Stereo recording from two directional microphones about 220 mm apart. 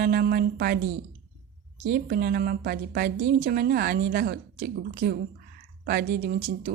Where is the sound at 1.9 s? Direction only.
45° right (ahead or behind).